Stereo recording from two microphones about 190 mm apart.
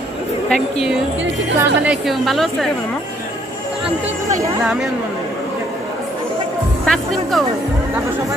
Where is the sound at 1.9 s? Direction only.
Centre (ahead or behind).